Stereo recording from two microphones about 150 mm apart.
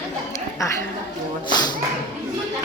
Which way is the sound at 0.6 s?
20° left (ahead or behind).